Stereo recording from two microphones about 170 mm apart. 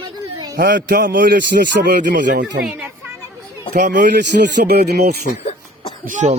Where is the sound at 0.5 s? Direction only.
60° right (ahead or behind).